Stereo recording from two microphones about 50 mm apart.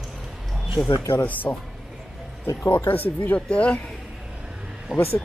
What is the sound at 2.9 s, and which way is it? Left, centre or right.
Speech, left.